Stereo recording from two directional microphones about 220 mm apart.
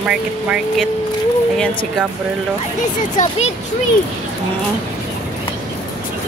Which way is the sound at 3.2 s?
30° left (ahead or behind).